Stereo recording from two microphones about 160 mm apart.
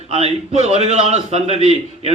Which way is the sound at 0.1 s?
40° right (ahead or behind).